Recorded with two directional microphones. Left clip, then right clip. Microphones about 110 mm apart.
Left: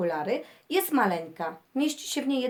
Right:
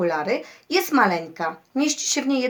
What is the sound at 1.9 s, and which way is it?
Speech, 55° left (ahead or behind).